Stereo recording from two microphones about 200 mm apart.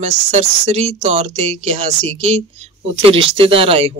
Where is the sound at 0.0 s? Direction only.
35° right (ahead or behind).